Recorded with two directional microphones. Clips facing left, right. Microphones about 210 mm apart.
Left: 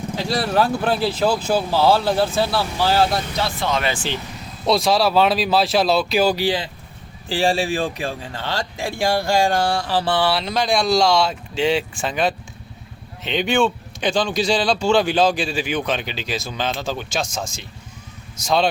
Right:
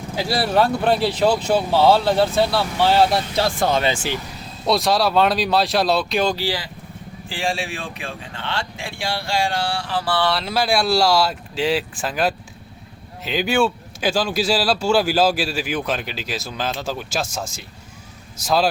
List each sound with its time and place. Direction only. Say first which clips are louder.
0.2 s speech: right 1 dB; 5° right (ahead or behind)
3.4 s speech: right 3 dB; 45° right (ahead or behind)
3.8 s speech: right 2 dB; 25° right (ahead or behind)
4.6 s speech: left 1 dB; centre (ahead or behind)
6.3 s speech: left 4 dB; 20° left (ahead or behind)
7.3 s speech: left 6 dB; 35° left (ahead or behind)
10.2 s speech: right 1 dB; 5° left (ahead or behind)
10.4 s speech: even; 5° right (ahead or behind)